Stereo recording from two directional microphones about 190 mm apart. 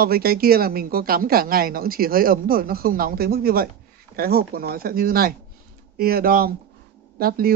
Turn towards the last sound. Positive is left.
turn(degrees=-50)  # may be behind; listen again after turning